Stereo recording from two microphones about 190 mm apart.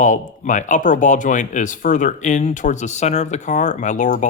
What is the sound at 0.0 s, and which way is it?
Speech, 40° left (ahead or behind).